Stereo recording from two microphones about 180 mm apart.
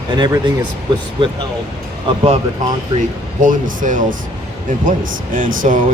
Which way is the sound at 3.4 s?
45° right (ahead or behind).